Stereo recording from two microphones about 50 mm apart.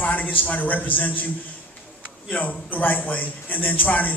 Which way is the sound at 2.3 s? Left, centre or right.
Left.